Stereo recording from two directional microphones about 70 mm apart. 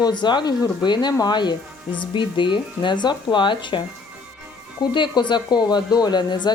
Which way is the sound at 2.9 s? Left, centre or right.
Left.